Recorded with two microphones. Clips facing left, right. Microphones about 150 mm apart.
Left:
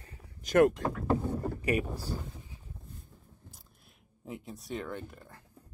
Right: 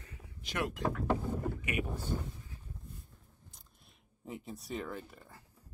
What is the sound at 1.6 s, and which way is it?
Speech, 35° left (ahead or behind).